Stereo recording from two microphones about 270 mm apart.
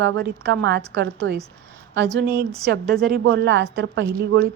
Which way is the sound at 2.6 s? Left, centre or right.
Right.